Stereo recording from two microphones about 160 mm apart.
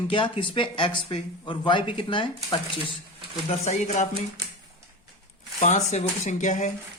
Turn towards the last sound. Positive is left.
turn(degrees=50)  # may be behind; listen again after turning